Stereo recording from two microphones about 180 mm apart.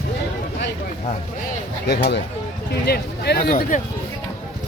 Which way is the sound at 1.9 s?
70° left (ahead or behind).